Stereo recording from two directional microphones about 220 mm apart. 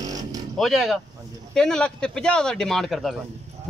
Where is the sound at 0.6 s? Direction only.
Centre (ahead or behind).